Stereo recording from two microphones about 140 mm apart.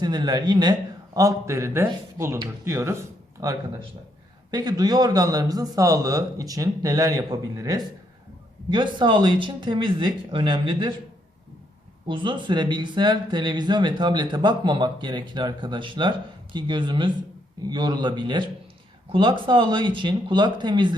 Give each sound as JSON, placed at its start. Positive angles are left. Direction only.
{"t": 0.0, "sound": "a man's voice", "side_deg": -30}
{"t": 12.0, "sound": "speech", "side_deg": -35}